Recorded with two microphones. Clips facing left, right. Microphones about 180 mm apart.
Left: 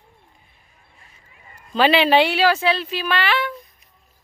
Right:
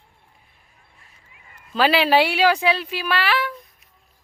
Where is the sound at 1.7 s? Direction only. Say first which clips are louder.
Left 2 dB; 5° right (ahead or behind).